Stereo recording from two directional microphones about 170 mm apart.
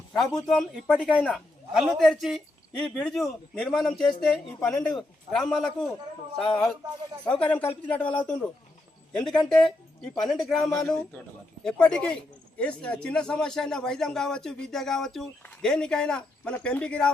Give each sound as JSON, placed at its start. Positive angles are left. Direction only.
{"t": 0.2, "sound": "speech", "side_deg": 5}
{"t": 10.6, "sound": "a man's voice", "side_deg": 20}
{"t": 10.8, "sound": "speech", "side_deg": 5}